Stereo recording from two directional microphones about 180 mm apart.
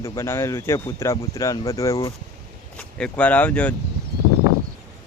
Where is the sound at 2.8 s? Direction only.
5° left (ahead or behind).